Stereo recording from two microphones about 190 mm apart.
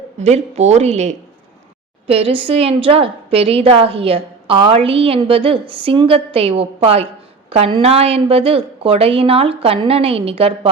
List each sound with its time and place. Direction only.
0.2 s a woman's voice: 35° right (ahead or behind)